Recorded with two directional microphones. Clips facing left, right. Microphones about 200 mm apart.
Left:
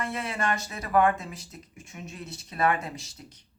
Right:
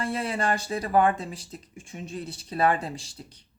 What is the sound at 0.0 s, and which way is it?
Speech, 30° right (ahead or behind).